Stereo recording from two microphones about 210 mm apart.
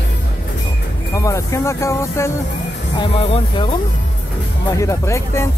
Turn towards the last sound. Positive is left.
turn(degrees=15)  # may be behind; listen again after turning